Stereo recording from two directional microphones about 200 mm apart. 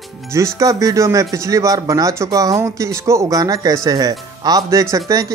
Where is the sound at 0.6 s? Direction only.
15° right (ahead or behind).